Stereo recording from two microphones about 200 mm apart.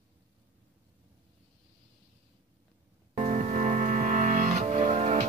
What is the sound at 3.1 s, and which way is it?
Music, 35° right (ahead or behind).